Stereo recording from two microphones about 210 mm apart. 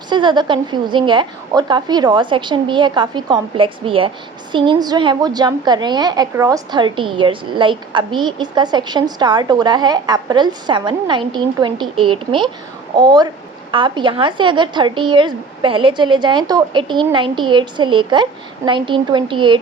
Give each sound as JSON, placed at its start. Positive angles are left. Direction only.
{"t": 0.1, "sound": "a woman's voice", "side_deg": -20}